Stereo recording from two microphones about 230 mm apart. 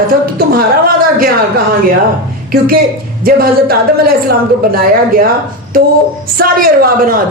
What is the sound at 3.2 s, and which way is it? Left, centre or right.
Speech, right.